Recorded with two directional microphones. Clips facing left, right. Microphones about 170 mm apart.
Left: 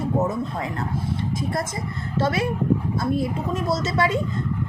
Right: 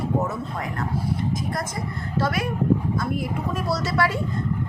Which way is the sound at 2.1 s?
25° left (ahead or behind).